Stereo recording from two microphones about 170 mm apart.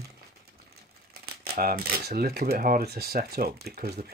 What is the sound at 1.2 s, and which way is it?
Speech, 60° right (ahead or behind).